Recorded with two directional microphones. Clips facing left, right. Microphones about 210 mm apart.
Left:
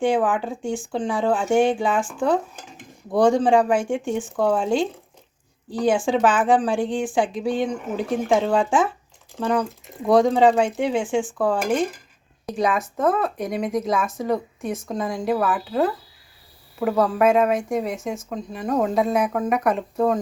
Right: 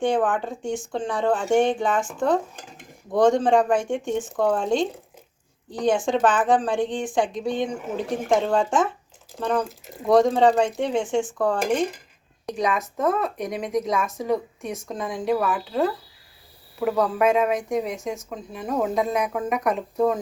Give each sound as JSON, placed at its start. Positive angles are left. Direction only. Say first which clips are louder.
{"t": 0.0, "sound": "speech", "louder": "left 2 dB", "side_deg": 10}
{"t": 6.1, "sound": "speech", "louder": "left 1 dB", "side_deg": 5}